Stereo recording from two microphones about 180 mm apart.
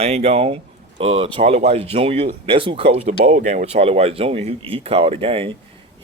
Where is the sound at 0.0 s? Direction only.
35° right (ahead or behind).